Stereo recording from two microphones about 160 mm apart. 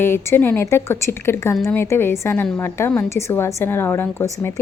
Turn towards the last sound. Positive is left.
turn(degrees=15)  # may be behind; listen again after turning